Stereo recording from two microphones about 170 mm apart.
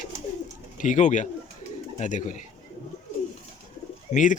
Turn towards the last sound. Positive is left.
turn(degrees=50)  # may be behind; listen again after turning